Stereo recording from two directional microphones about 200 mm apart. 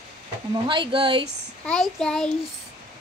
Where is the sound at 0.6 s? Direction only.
25° right (ahead or behind).